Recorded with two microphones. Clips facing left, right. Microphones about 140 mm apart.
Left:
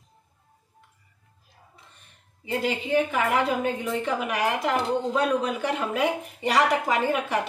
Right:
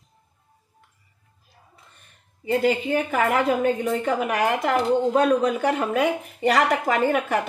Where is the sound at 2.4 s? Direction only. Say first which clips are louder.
Right 5 dB; 45° right (ahead or behind).